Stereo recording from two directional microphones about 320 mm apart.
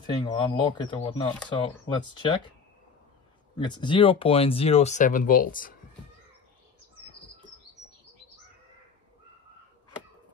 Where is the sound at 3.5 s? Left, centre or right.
Centre.